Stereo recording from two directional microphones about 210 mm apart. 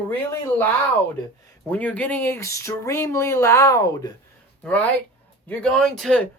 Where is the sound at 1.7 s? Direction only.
10° left (ahead or behind).